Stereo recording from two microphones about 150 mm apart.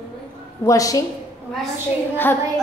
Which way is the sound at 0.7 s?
20° left (ahead or behind).